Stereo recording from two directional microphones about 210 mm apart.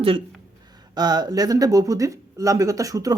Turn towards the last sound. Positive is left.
turn(degrees=-15)  # may be behind; listen again after turning